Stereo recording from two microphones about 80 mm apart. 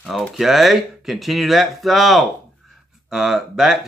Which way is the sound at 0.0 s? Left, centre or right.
Centre.